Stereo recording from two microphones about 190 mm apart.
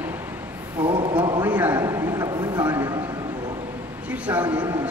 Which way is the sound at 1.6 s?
15° right (ahead or behind).